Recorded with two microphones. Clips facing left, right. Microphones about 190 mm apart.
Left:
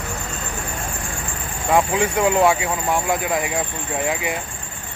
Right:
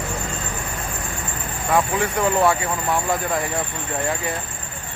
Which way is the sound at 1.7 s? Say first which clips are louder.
Left 2 dB; 15° left (ahead or behind).